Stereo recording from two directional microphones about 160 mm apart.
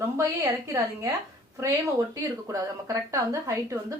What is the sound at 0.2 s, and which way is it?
Speech, 20° right (ahead or behind).